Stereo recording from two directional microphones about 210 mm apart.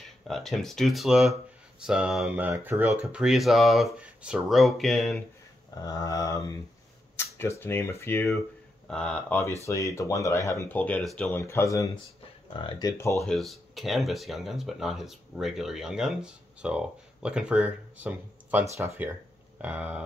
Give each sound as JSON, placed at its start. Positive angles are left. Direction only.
{"t": 0.0, "sound": "speech", "side_deg": 0}
{"t": 5.8, "sound": "speech", "side_deg": 15}
{"t": 13.2, "sound": "speech", "side_deg": 0}